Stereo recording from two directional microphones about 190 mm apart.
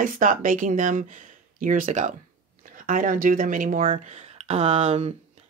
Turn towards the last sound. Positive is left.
turn(degrees=-35)  # may be behind; listen again after turning